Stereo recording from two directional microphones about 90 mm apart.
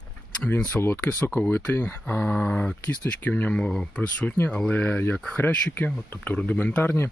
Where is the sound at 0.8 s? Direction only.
25° left (ahead or behind).